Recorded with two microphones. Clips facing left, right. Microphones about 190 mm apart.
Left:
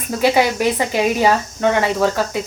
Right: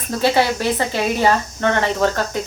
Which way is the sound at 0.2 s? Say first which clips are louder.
Left 2 dB; 15° left (ahead or behind).